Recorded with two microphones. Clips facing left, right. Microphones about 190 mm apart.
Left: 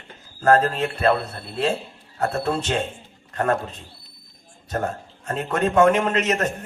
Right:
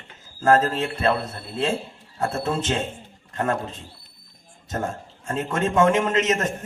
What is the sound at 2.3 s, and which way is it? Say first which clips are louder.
Speech: left 1 dB; 25° right (ahead or behind).